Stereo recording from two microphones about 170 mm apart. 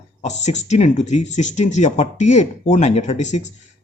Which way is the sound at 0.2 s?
40° left (ahead or behind).